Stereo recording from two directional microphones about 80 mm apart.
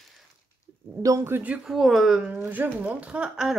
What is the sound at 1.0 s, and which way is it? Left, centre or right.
Speech, right.